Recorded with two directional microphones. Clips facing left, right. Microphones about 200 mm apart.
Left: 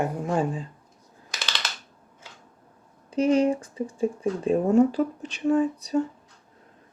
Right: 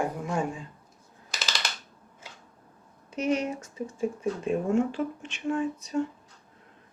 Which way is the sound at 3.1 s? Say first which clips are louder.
Left 7 dB; 30° left (ahead or behind).